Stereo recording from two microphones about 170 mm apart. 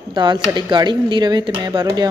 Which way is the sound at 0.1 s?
25° right (ahead or behind).